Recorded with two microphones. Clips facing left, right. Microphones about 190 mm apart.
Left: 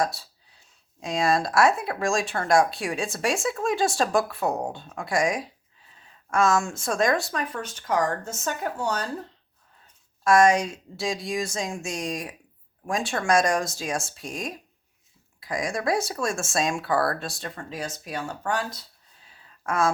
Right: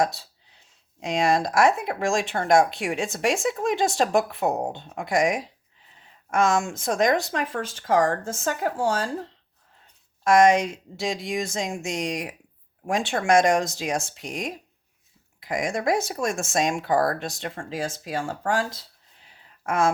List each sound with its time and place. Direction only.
0.0 s speech: 20° right (ahead or behind)
7.5 s speech: 90° right
7.8 s speech: 30° right (ahead or behind)
10.3 s speech: 20° right (ahead or behind)